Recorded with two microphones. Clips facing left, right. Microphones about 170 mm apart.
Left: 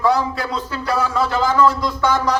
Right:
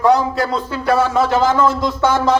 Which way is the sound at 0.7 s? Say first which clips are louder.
Right 5 dB; 25° right (ahead or behind).